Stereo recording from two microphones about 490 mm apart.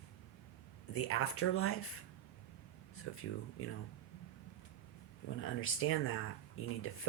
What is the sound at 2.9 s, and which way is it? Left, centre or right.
Speech, left.